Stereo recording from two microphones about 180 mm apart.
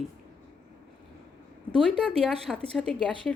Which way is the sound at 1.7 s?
5° left (ahead or behind).